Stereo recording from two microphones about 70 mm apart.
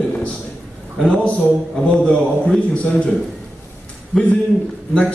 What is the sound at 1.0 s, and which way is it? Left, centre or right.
A man's voice, centre.